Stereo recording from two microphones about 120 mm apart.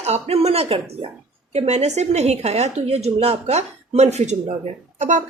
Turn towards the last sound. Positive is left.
turn(degrees=-90)